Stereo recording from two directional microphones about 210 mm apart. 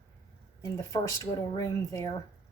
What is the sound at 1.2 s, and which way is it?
Speech, 15° left (ahead or behind).